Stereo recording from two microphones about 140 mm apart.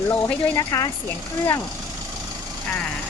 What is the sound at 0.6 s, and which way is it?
Speech, 25° left (ahead or behind).